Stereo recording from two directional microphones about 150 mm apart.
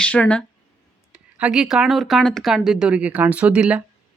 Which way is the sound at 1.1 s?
5° right (ahead or behind).